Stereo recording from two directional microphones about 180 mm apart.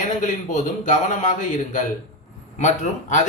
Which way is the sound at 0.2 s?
45° left (ahead or behind).